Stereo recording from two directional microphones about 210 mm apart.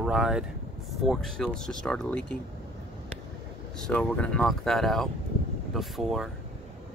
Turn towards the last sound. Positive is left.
turn(degrees=0)  # may be behind; listen again after turning